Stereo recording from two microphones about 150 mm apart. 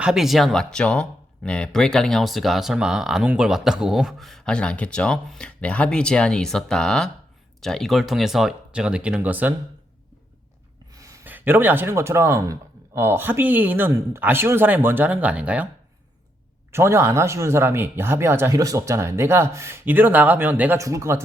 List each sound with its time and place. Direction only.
0.0 s speech: 5° right (ahead or behind)
10.9 s speech: 20° right (ahead or behind)
16.7 s speech: 15° right (ahead or behind)